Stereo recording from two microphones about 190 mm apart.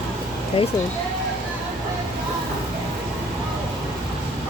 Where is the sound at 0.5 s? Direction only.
30° left (ahead or behind).